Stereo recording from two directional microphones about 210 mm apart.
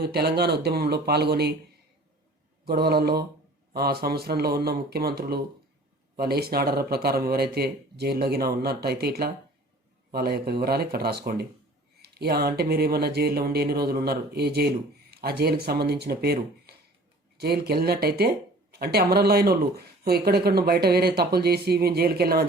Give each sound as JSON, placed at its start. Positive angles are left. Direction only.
{"t": 0.0, "sound": "speech", "side_deg": -50}
{"t": 2.6, "sound": "speech", "side_deg": -50}